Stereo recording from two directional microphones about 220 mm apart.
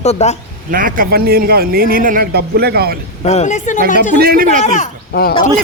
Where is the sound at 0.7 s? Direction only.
40° right (ahead or behind).